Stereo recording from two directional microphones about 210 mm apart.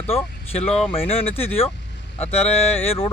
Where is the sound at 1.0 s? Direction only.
30° left (ahead or behind).